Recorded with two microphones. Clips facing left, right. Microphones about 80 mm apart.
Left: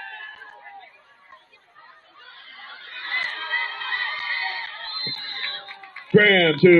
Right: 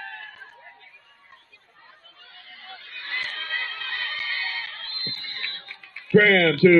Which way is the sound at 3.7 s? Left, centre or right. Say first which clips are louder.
Left 3 dB; left.